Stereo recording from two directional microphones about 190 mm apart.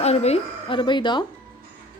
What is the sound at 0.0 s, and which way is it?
A woman's voice, 35° left (ahead or behind).